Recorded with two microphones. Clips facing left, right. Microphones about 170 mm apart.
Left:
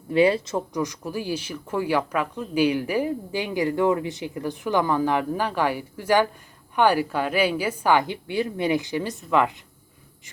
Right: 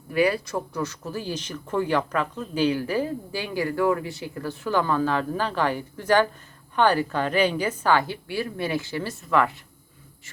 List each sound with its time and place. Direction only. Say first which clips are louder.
0.1 s speech: left 3 dB; 25° left (ahead or behind)